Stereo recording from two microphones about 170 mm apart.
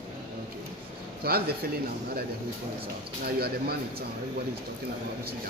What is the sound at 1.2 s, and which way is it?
Speech, 65° right (ahead or behind).